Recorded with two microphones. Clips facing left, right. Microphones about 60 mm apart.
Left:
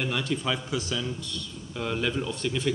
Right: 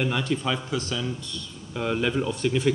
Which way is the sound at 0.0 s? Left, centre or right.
Centre.